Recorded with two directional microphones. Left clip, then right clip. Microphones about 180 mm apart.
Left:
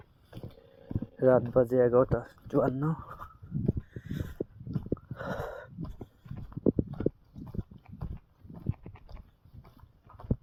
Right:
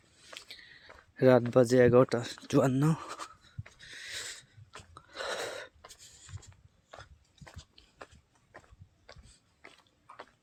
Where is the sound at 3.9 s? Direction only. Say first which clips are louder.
Right 4 dB; 35° right (ahead or behind).